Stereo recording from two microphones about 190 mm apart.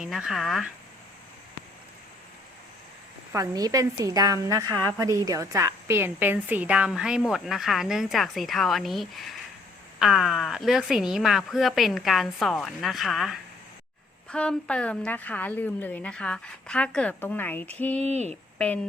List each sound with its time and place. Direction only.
0.0 s a woman's voice: centre (ahead or behind)
3.3 s a woman's voice: 20° right (ahead or behind); by 18.0 s 10° left (ahead or behind)
18.0 s speech: 35° right (ahead or behind)